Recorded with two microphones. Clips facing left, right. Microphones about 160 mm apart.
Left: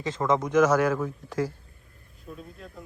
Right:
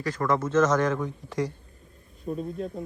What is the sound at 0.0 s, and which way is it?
A man's voice, 20° left (ahead or behind).